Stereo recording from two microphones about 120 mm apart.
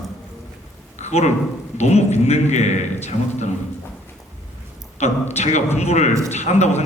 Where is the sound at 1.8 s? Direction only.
65° left (ahead or behind).